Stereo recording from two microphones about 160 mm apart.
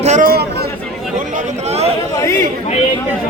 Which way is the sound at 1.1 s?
50° right (ahead or behind).